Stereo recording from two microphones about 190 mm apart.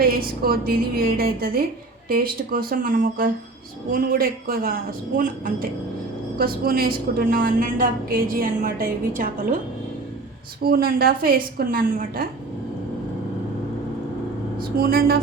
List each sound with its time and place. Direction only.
0.0 s a woman's voice: 50° right (ahead or behind)
10.6 s a woman's voice: 50° right (ahead or behind)
14.6 s a woman's voice: 50° right (ahead or behind)